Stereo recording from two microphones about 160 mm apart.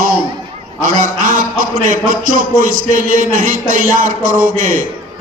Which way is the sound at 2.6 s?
60° right (ahead or behind).